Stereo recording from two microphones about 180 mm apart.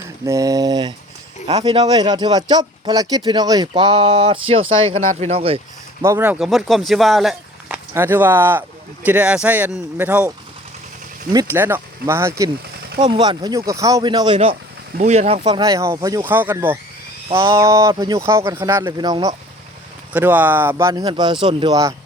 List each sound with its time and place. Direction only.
0.3 s speech: 20° right (ahead or behind)
6.0 s speech: 15° right (ahead or behind)
7.9 s speech: 10° right (ahead or behind)
11.3 s speech: 15° right (ahead or behind); by 15.4 s 35° right (ahead or behind)
15.4 s speech: 20° right (ahead or behind)
20.1 s speech: 10° right (ahead or behind)